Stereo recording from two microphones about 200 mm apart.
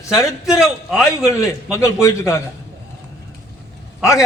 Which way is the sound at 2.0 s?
15° left (ahead or behind).